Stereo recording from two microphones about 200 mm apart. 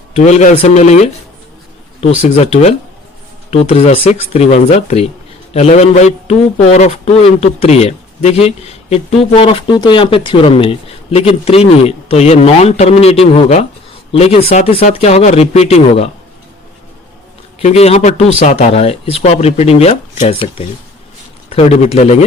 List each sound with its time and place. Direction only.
0.2 s a man's voice: 35° left (ahead or behind)
17.6 s a man's voice: 30° left (ahead or behind)